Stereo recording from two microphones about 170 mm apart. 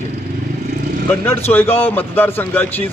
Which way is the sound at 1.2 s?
15° left (ahead or behind).